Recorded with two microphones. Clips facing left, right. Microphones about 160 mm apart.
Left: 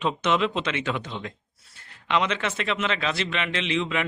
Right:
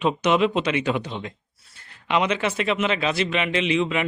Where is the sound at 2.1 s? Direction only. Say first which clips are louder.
Right 3 dB; 10° right (ahead or behind).